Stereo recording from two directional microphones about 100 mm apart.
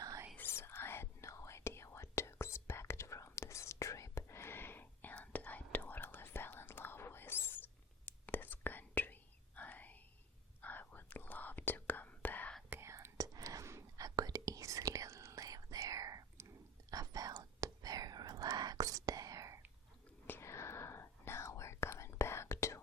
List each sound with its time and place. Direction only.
0.3 s whispering: 25° left (ahead or behind)
12.7 s whispering: 25° right (ahead or behind)
20.2 s whispering: 25° left (ahead or behind)